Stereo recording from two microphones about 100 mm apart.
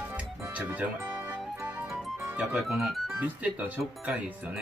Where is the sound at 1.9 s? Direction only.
Centre (ahead or behind).